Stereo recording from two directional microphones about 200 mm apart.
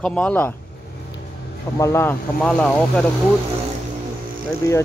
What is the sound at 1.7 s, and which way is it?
Speech, 15° left (ahead or behind).